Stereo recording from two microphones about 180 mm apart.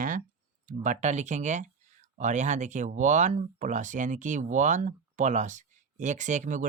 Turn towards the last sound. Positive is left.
turn(degrees=-45)  # may be behind; listen again after turning